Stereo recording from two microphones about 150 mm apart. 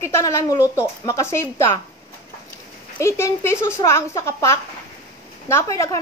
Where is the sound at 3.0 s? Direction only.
20° left (ahead or behind).